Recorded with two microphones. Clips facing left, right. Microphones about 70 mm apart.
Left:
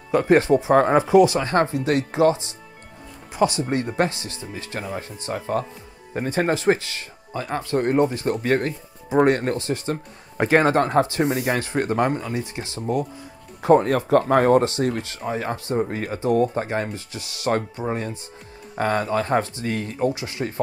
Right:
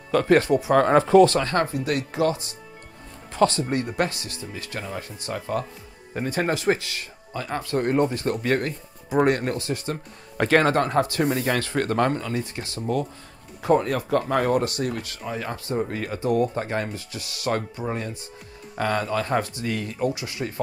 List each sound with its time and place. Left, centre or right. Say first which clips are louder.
0.1 s speech: left 2 dB; left
0.8 s speech: even; centre; by 20.6 s left